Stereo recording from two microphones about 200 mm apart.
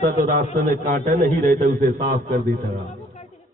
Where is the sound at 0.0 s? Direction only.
40° right (ahead or behind).